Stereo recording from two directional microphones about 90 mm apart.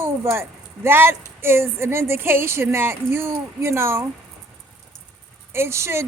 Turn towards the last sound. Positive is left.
turn(degrees=-30)  # may be behind; listen again after turning